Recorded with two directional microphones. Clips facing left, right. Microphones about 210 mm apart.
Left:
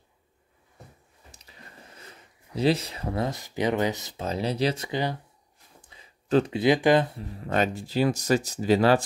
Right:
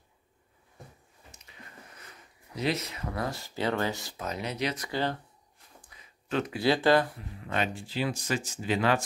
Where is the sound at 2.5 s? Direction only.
30° left (ahead or behind).